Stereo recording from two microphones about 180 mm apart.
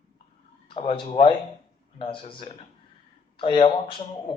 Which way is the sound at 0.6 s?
30° left (ahead or behind).